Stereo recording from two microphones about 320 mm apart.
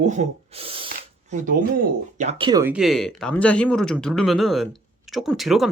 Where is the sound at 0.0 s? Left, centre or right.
Right.